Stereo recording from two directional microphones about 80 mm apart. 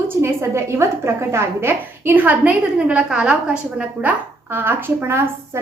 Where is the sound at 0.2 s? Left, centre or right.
Right; by 4.1 s centre.